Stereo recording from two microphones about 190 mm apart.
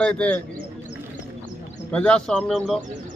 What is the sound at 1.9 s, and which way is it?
Speech, 5° left (ahead or behind).